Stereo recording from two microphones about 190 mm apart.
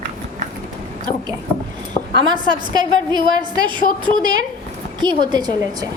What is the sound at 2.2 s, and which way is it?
A woman's voice, 25° right (ahead or behind).